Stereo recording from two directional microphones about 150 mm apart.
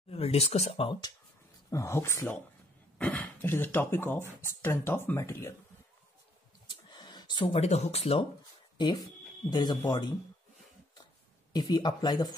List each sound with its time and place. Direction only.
0.1 s speech: 40° left (ahead or behind)
1.7 s speech: 20° left (ahead or behind)
6.9 s speech: 30° left (ahead or behind)
8.7 s speech: 30° left (ahead or behind)
11.5 s speech: 30° left (ahead or behind)